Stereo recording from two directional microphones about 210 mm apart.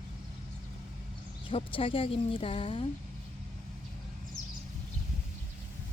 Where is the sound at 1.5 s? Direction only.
25° left (ahead or behind).